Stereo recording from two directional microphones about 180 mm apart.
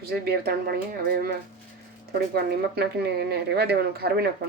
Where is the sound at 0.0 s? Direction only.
60° right (ahead or behind).